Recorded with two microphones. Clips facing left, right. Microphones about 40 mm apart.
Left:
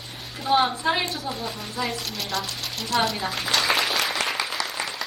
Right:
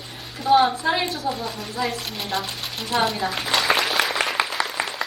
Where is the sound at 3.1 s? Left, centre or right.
Centre.